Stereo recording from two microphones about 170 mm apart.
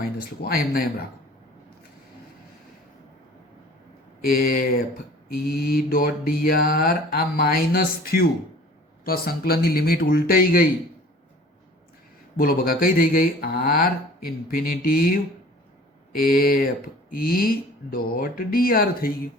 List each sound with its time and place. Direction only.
0.0 s mantra: 60° left (ahead or behind)
4.2 s mantra: 60° left (ahead or behind)
12.4 s mantra: 60° left (ahead or behind)